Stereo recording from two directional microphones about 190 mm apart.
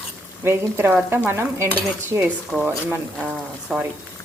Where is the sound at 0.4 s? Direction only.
10° right (ahead or behind).